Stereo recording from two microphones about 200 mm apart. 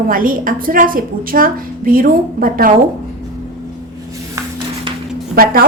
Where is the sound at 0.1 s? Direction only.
45° right (ahead or behind).